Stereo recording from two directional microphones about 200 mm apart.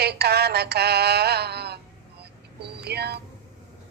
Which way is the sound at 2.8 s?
55° right (ahead or behind).